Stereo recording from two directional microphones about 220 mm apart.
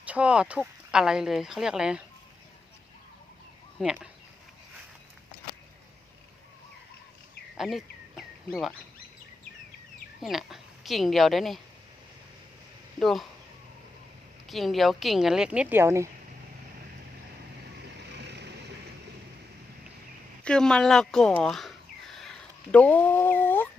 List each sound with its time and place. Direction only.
0.0 s speech: 5° right (ahead or behind)
3.8 s speech: 5° right (ahead or behind)
7.5 s duck: centre (ahead or behind)
10.2 s speech: centre (ahead or behind)
13.0 s speech: centre (ahead or behind)
14.4 s speech: centre (ahead or behind)
18.1 s vehicle: 50° right (ahead or behind)
20.4 s speech: 5° left (ahead or behind)